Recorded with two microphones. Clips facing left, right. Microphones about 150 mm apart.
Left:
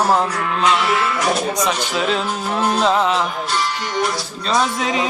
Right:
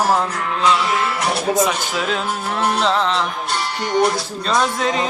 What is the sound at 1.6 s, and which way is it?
Speech, centre (ahead or behind).